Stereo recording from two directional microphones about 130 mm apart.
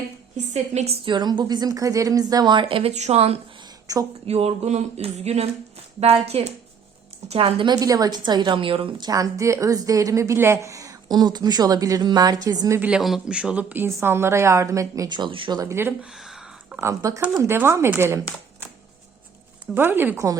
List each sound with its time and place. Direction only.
0.5 s a woman's voice: 60° right (ahead or behind)
1.0 s a woman's voice: 35° right (ahead or behind)
2.9 s a woman's voice: 55° right (ahead or behind)
3.9 s a woman's voice: 25° right (ahead or behind)
4.3 s a sound: 50° right (ahead or behind)
7.7 s a woman's voice: 30° right (ahead or behind); by 9.0 s 45° right (ahead or behind)
9.0 s a woman's voice: 25° right (ahead or behind)
12.8 s a woman's voice: 5° right (ahead or behind); by 15.7 s 35° right (ahead or behind)
15.7 s a sound: 15° right (ahead or behind)
16.7 s a woman's voice: 25° right (ahead or behind)
19.7 s speech: 15° right (ahead or behind)